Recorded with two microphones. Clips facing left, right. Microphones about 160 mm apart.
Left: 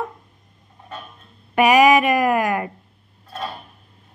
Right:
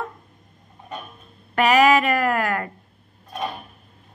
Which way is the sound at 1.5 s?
15° left (ahead or behind).